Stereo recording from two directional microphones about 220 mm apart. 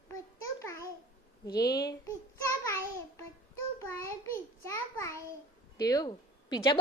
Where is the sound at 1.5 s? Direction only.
45° left (ahead or behind).